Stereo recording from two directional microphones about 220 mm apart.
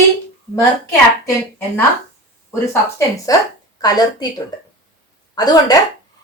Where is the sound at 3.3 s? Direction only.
15° left (ahead or behind).